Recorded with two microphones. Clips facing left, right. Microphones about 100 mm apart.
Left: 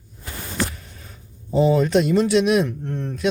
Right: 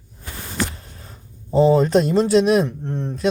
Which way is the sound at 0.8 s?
35° right (ahead or behind).